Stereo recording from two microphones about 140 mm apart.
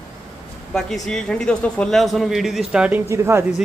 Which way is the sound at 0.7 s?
5° left (ahead or behind).